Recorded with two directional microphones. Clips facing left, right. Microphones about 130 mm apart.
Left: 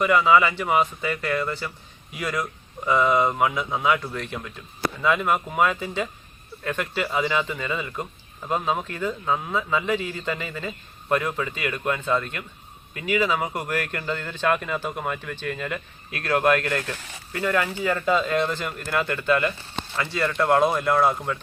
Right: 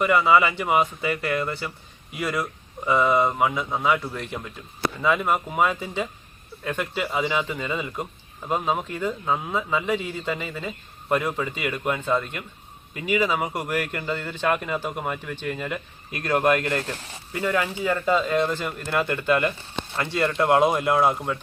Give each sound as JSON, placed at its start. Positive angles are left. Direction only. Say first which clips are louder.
{"t": 0.0, "sound": "speech", "louder": "even", "side_deg": -10}
{"t": 17.4, "sound": "speech", "louder": "even", "side_deg": -5}
{"t": 21.0, "sound": "speech", "louder": "even", "side_deg": -5}